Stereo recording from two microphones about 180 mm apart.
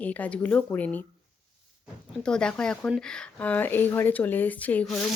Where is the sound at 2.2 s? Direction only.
5° left (ahead or behind).